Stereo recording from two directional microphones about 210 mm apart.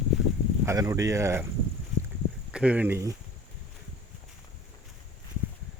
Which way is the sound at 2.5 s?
5° right (ahead or behind).